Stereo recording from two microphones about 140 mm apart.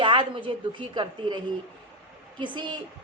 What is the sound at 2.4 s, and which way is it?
Speech, 35° right (ahead or behind).